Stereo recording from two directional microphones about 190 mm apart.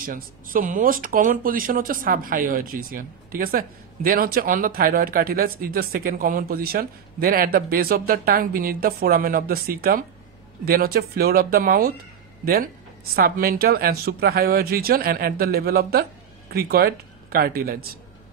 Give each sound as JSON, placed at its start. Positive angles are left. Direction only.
{"t": 0.0, "sound": "speech", "side_deg": -45}
{"t": 13.1, "sound": "speech", "side_deg": -50}